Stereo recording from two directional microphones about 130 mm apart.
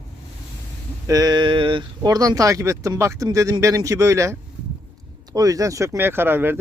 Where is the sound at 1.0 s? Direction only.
30° right (ahead or behind).